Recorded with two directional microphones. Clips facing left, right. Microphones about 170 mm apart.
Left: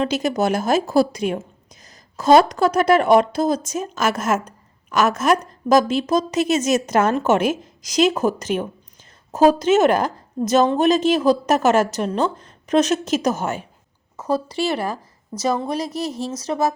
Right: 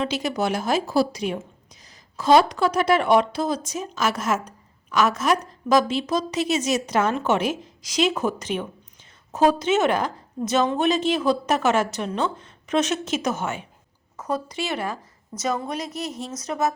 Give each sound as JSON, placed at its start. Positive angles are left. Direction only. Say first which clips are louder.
{"t": 0.0, "sound": "a woman's voice", "louder": "left 4 dB", "side_deg": 45}